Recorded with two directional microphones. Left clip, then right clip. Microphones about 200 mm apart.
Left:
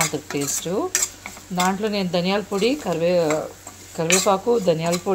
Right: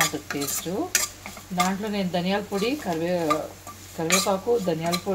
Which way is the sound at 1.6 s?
40° left (ahead or behind).